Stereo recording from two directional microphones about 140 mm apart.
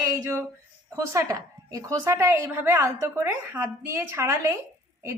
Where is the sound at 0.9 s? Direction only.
20° right (ahead or behind).